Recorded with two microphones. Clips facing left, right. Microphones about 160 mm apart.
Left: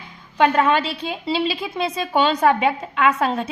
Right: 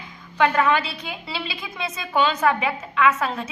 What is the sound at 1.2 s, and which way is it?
A woman's voice, 30° left (ahead or behind).